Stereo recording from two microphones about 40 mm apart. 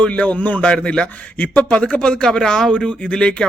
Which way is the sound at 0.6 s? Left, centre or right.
Left.